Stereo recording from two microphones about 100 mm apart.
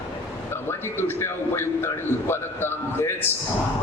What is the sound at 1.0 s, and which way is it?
A man's voice, 25° left (ahead or behind).